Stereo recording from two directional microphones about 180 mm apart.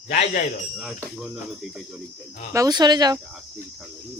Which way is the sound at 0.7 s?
5° right (ahead or behind).